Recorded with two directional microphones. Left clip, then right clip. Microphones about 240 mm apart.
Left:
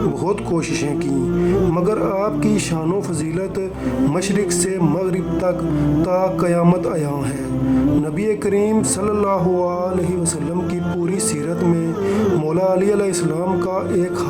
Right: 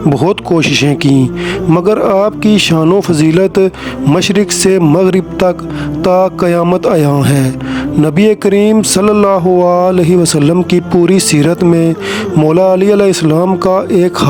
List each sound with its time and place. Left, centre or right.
0.2 s speech: right